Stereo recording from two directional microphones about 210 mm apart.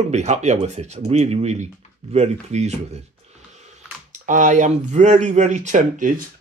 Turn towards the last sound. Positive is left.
turn(degrees=-40)  # may be behind; listen again after turning